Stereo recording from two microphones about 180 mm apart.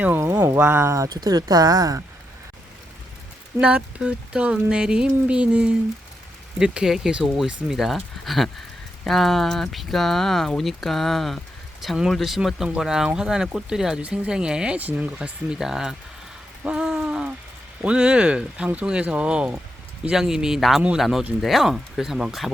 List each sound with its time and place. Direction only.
0.0 s speech: 10° right (ahead or behind)
3.6 s speech: 5° right (ahead or behind)
16.6 s a sound: 5° right (ahead or behind)
17.8 s speech: 5° right (ahead or behind)